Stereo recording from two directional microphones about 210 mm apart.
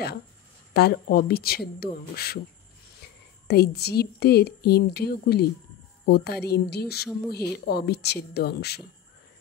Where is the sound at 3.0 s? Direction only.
50° left (ahead or behind).